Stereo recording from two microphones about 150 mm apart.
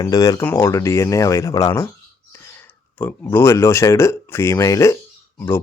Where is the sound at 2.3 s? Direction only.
15° left (ahead or behind).